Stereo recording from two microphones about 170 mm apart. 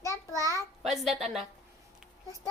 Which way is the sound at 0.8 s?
Centre (ahead or behind).